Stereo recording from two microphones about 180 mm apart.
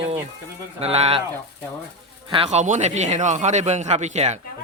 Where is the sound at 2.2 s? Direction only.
30° right (ahead or behind).